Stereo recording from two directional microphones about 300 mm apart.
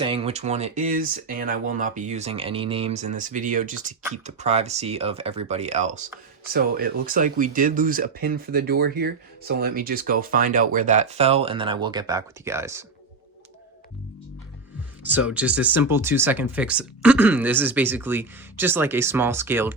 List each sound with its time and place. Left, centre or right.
0.0 s speech: centre
15.0 s speech: centre